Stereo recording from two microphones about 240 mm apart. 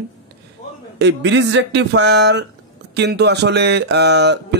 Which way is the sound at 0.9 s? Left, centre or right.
Right.